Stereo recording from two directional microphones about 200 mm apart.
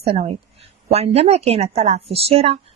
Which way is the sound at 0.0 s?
30° right (ahead or behind).